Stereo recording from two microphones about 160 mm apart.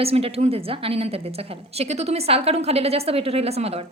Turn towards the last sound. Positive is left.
turn(degrees=-40)  # may be behind; listen again after turning